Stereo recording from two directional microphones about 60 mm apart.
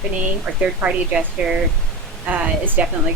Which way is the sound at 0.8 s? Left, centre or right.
Centre.